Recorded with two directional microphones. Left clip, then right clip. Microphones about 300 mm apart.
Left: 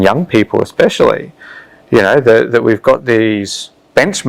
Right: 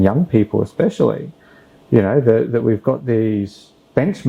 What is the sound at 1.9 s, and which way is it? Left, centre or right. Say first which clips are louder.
Speech: left 6 dB; centre.